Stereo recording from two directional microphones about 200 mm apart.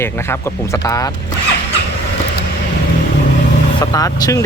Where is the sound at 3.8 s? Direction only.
20° left (ahead or behind).